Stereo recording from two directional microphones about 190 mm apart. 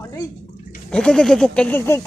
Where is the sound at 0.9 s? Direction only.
5° left (ahead or behind).